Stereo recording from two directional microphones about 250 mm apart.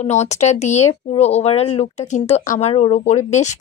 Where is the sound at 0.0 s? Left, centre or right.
Left.